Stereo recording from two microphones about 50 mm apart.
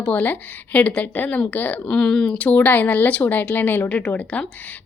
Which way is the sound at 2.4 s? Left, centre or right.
Left.